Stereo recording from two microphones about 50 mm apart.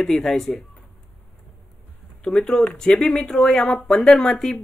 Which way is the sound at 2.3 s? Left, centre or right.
Centre.